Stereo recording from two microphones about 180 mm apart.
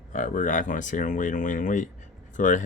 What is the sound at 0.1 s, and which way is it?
Speech, 45° left (ahead or behind).